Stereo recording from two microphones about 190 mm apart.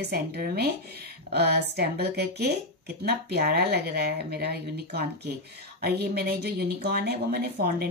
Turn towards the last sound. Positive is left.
turn(degrees=-55)  # may be behind; listen again after turning